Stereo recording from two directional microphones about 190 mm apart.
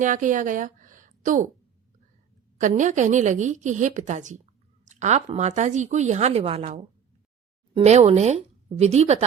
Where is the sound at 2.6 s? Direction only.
40° right (ahead or behind).